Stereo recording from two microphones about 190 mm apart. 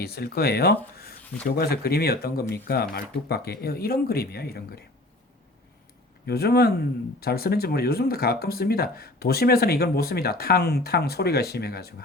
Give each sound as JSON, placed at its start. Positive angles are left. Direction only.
{"t": 0.0, "sound": "speech", "side_deg": 55}
{"t": 6.2, "sound": "speech", "side_deg": 55}